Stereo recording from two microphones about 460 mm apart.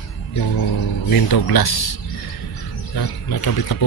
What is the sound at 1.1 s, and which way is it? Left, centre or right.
Speech, left.